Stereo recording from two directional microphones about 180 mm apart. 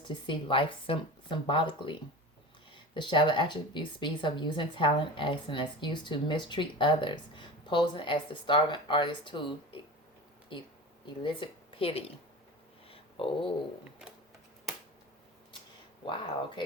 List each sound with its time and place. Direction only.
0.1 s speech: 25° left (ahead or behind)
11.0 s speech: 25° left (ahead or behind)
12.9 s a sound: 30° left (ahead or behind)